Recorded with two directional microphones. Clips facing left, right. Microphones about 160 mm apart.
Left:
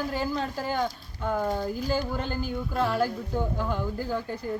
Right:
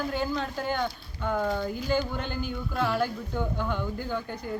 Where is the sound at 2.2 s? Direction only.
35° left (ahead or behind).